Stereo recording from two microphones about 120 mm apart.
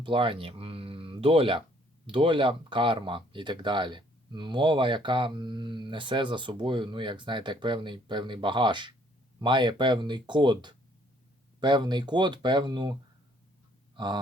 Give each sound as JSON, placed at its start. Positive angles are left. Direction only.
{"t": 0.0, "sound": "speech", "side_deg": -45}
{"t": 13.9, "sound": "speech", "side_deg": -40}